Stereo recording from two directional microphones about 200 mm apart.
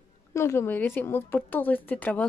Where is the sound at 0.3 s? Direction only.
15° left (ahead or behind).